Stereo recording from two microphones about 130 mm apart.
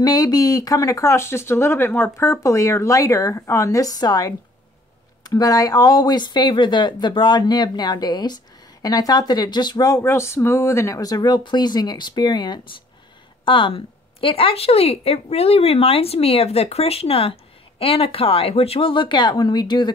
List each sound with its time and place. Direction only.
0.0 s a woman's voice: 30° left (ahead or behind)